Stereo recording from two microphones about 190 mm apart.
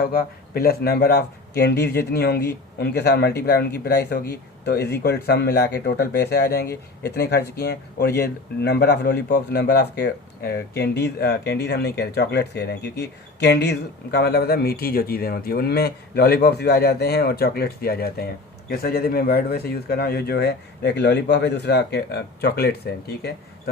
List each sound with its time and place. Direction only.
0.0 s speech: 50° left (ahead or behind)